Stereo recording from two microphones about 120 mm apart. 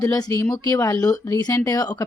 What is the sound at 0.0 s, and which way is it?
Speech, 30° left (ahead or behind).